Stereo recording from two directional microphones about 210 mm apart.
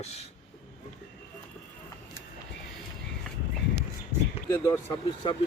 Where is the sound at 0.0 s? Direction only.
30° left (ahead or behind).